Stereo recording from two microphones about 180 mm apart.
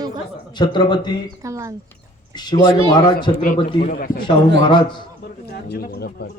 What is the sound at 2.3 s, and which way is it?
A man's voice, 25° left (ahead or behind).